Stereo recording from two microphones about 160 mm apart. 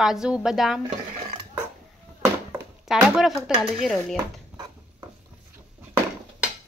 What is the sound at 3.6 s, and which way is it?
Speech, centre (ahead or behind).